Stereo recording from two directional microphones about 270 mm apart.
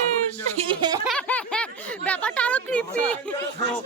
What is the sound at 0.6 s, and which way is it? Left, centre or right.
Speech, centre.